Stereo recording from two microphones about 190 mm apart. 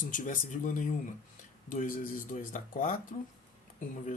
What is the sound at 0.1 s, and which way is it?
Speech, 45° left (ahead or behind).